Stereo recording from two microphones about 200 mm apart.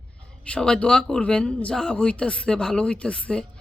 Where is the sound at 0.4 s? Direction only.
5° left (ahead or behind).